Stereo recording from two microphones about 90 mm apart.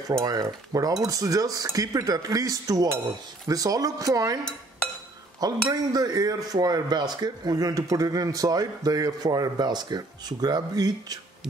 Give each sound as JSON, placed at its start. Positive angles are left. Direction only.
{"t": 0.2, "sound": "speech", "side_deg": -40}
{"t": 5.4, "sound": "speech", "side_deg": -45}